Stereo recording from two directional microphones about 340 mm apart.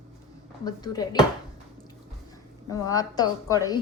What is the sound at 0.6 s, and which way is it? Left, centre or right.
Speech, centre.